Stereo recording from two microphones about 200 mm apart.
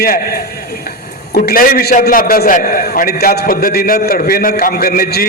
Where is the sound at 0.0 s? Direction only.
45° left (ahead or behind).